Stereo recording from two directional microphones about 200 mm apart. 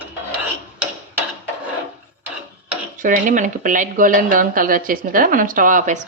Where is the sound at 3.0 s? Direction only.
40° right (ahead or behind).